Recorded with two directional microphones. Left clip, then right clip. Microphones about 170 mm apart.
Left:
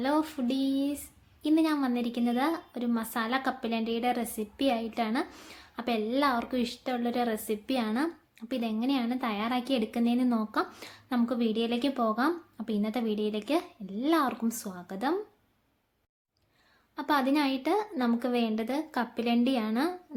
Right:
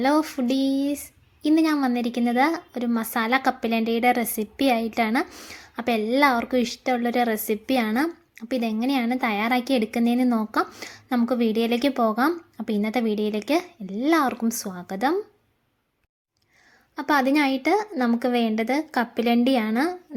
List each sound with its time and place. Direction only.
0.0 s a woman's voice: 40° right (ahead or behind)
16.9 s a woman's voice: 30° right (ahead or behind)